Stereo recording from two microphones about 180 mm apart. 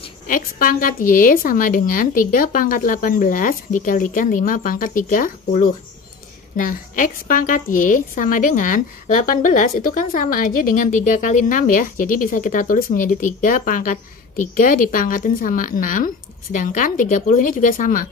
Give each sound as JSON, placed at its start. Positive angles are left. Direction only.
{"t": 0.3, "sound": "a woman's voice", "side_deg": 50}